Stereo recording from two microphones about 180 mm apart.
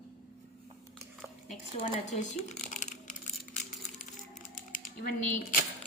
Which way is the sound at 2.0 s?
40° left (ahead or behind).